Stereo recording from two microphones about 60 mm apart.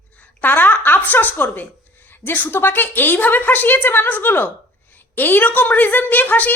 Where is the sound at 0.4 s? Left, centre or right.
Left.